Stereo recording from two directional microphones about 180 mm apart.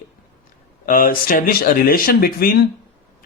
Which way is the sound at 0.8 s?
50° left (ahead or behind).